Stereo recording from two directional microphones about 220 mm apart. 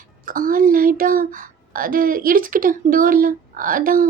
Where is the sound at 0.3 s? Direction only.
40° right (ahead or behind).